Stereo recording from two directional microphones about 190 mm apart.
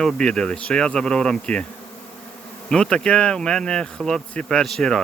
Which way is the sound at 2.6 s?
5° left (ahead or behind).